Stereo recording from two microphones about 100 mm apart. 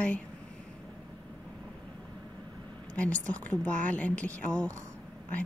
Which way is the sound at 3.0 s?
15° left (ahead or behind).